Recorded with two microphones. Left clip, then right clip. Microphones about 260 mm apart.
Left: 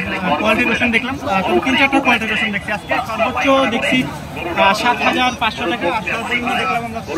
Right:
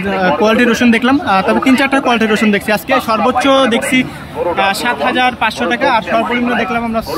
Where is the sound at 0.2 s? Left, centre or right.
Centre.